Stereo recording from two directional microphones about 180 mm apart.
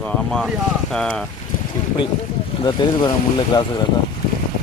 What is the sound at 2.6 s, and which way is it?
Speech, 25° left (ahead or behind).